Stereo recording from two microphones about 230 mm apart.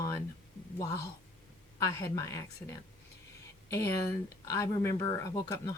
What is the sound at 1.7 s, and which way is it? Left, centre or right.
Speech, centre.